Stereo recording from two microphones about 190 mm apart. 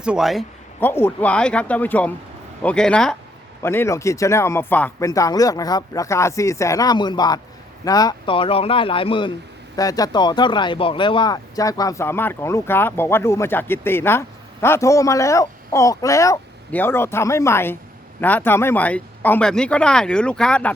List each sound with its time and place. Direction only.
0.0 s speech: 5° right (ahead or behind)
0.8 s speech: 10° left (ahead or behind)